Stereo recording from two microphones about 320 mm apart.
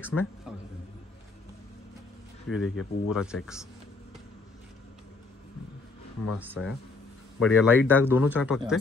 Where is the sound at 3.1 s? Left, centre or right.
Centre.